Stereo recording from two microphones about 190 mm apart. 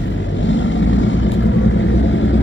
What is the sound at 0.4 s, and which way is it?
Vehicle, 80° left.